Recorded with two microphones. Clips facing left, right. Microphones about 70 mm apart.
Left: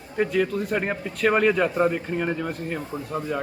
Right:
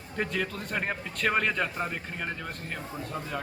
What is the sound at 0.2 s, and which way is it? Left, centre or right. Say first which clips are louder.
A man's voice: left 9 dB; centre.